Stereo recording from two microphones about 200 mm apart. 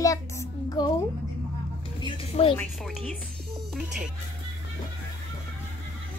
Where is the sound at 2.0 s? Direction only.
30° left (ahead or behind).